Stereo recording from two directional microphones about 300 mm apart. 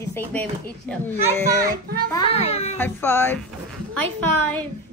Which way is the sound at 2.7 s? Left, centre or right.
Centre.